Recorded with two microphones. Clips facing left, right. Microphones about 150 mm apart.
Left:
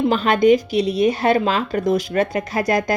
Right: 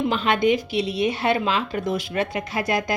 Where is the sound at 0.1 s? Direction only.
40° left (ahead or behind).